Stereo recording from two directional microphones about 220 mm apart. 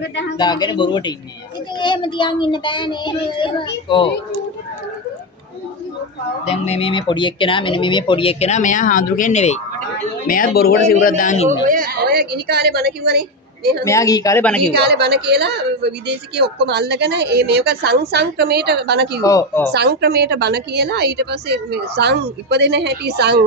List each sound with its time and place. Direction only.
0.4 s speech: 20° left (ahead or behind)
6.4 s a man's voice: 30° left (ahead or behind)
11.6 s a woman's voice: 40° right (ahead or behind)
13.8 s speech: 15° left (ahead or behind)
14.7 s a woman's voice: 50° right (ahead or behind)
19.2 s speech: 15° left (ahead or behind)
19.7 s a woman's voice: 50° right (ahead or behind)